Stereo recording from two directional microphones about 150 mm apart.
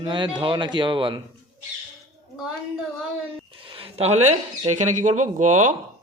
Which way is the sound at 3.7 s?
40° right (ahead or behind).